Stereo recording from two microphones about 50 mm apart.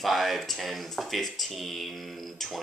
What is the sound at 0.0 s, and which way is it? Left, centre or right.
A woman's voice, centre.